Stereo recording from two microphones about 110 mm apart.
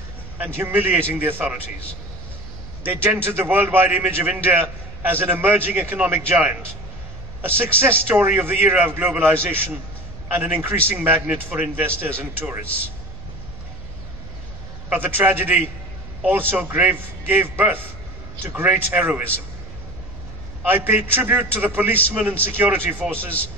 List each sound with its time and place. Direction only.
0.4 s a man's voice: 15° right (ahead or behind)
2.8 s a man's voice: 20° right (ahead or behind)
14.9 s a man's voice: 15° right (ahead or behind)
20.6 s a man's voice: 20° right (ahead or behind)